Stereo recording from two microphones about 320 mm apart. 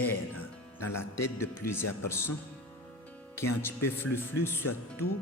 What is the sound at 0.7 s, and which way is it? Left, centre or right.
Speech, centre.